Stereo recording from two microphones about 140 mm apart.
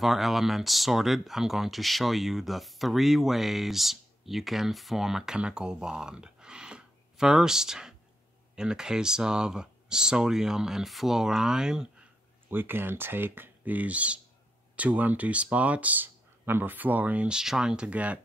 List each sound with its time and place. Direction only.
0.0 s speech: centre (ahead or behind)
12.4 s speech: 15° right (ahead or behind)